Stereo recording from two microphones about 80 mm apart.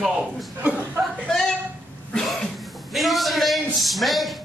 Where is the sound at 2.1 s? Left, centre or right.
Centre.